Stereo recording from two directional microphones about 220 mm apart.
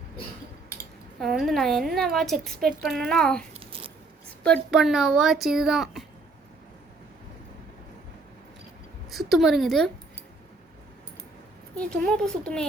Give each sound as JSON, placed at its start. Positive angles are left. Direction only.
{"t": 1.2, "sound": "speech", "side_deg": 0}
{"t": 3.7, "sound": "a sound", "side_deg": -25}
{"t": 4.4, "sound": "speech", "side_deg": 0}
{"t": 9.0, "sound": "a woman's voice", "side_deg": 0}
{"t": 11.7, "sound": "speech", "side_deg": 5}